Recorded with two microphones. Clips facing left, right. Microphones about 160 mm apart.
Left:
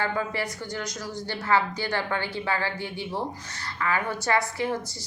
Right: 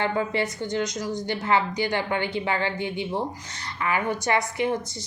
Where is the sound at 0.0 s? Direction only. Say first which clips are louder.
Right 3 dB; 25° right (ahead or behind).